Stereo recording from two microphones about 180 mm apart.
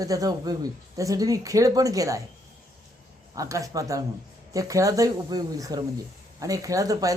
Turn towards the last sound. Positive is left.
turn(degrees=-20)  # may be behind; listen again after turning